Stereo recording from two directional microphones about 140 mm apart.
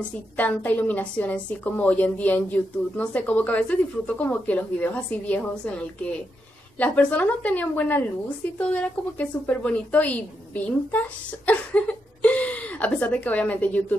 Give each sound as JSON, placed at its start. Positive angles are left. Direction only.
{"t": 0.4, "sound": "a woman's voice", "side_deg": 10}
{"t": 6.8, "sound": "a woman's voice", "side_deg": 10}
{"t": 9.2, "sound": "a woman's voice", "side_deg": 10}